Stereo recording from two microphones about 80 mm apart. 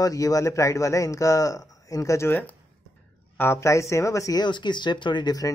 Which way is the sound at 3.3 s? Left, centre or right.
Left.